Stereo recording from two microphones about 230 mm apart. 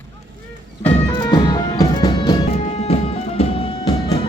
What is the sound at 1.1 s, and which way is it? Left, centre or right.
Music, centre.